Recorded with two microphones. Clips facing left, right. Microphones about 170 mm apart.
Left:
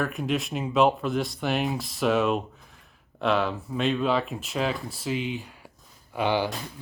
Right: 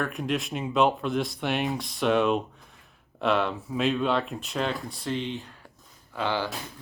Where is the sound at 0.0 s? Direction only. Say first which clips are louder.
Left 1 dB; centre (ahead or behind).